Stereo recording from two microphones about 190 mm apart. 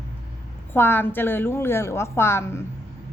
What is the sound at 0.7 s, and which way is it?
A woman's voice, 10° left (ahead or behind).